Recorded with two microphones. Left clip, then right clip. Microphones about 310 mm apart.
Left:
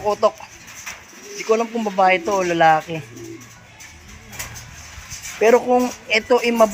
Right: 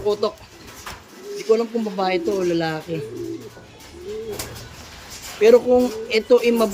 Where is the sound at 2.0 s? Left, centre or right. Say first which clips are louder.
Left 5 dB; centre.